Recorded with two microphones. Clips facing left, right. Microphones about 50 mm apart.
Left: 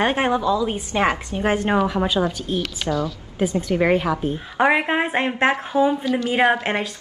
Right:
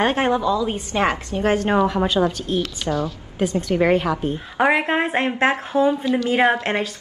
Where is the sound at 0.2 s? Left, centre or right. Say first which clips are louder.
Even; centre.